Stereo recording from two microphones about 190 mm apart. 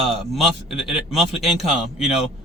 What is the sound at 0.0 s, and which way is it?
Speech, centre (ahead or behind).